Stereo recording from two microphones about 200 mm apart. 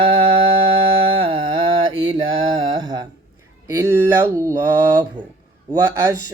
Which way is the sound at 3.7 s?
15° right (ahead or behind).